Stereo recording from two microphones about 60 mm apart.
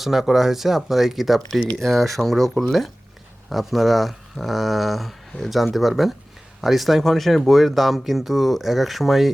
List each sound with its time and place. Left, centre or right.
0.0 s speech: centre